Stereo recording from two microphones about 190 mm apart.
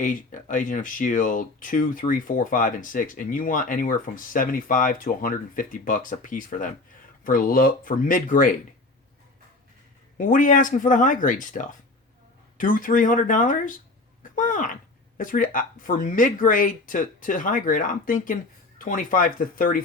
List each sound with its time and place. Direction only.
0.0 s speech: 45° left (ahead or behind)
10.2 s speech: 45° left (ahead or behind)
14.3 s a sound: 45° left (ahead or behind)
15.2 s speech: 45° left (ahead or behind)